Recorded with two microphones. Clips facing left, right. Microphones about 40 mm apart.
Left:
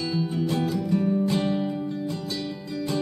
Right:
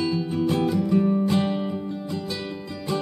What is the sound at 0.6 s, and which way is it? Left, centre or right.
Music, centre.